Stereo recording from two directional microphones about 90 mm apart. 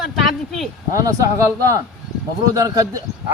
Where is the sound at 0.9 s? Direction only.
40° right (ahead or behind).